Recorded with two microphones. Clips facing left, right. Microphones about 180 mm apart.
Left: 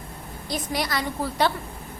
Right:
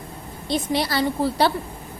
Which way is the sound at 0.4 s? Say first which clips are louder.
Right 5 dB; 25° right (ahead or behind).